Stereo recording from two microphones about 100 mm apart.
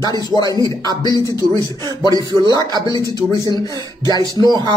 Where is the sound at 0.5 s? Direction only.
40° right (ahead or behind).